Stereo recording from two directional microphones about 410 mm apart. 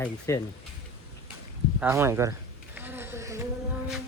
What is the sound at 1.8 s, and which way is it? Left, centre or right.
Bee, centre.